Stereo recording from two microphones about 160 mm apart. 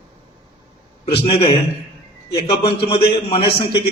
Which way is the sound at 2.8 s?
35° left (ahead or behind).